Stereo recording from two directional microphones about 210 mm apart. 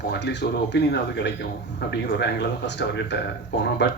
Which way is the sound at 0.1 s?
55° left (ahead or behind).